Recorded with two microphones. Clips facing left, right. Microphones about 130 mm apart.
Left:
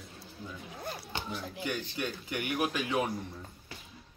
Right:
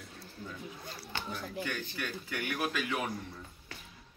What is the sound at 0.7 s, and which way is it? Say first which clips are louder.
Speech: left 6 dB; 55° left (ahead or behind).